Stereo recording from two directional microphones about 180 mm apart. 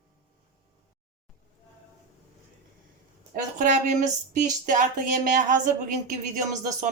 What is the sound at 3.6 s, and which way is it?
Speech, 45° right (ahead or behind).